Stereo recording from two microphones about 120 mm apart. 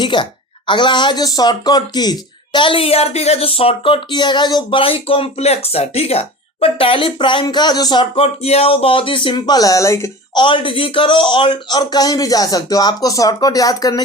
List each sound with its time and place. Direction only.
0.0 s speech: 40° left (ahead or behind)
8.1 s speech: 55° left (ahead or behind); by 10.1 s 25° left (ahead or behind)
10.3 s speech: 45° left (ahead or behind)